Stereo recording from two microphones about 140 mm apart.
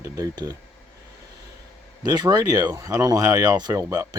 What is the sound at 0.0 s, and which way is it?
Speech, 25° right (ahead or behind).